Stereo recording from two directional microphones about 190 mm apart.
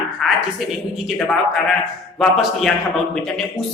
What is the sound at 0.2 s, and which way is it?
A man's voice, centre (ahead or behind).